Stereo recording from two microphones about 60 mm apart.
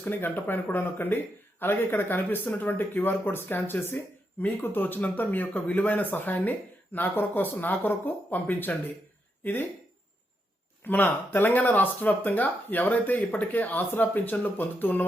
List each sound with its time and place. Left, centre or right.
0.0 s a man's voice: left
10.8 s a man's voice: left